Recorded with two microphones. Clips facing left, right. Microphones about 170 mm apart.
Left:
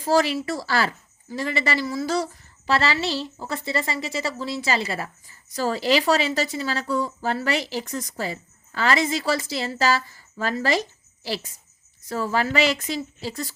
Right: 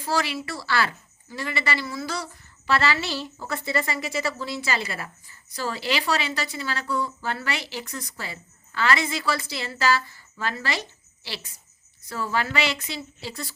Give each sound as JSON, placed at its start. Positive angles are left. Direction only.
{"t": 0.0, "sound": "a woman's voice", "side_deg": 40}